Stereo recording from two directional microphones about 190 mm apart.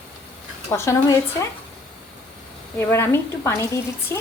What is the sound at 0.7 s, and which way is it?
Speech, 15° left (ahead or behind).